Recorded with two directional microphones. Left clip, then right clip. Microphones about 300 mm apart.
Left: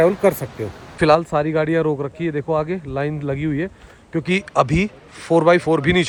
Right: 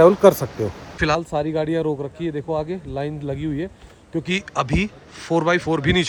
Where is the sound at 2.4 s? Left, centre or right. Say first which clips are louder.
Left 5 dB; centre.